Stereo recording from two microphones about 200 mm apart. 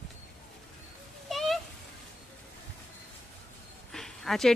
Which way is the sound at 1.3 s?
Centre (ahead or behind).